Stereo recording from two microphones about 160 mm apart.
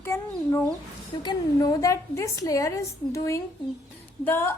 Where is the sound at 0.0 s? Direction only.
15° left (ahead or behind).